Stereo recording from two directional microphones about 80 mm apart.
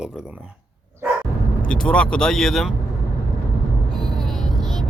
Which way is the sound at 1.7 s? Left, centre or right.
Centre.